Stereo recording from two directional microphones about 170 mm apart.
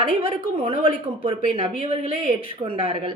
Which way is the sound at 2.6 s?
30° right (ahead or behind).